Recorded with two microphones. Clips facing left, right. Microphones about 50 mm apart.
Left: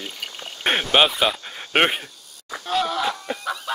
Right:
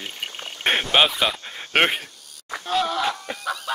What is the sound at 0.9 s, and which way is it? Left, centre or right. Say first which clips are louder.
Speech: left 2 dB; centre.